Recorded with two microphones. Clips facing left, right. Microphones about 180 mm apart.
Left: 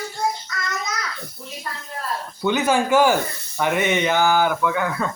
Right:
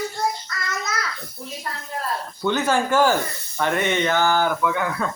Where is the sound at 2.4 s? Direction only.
10° left (ahead or behind).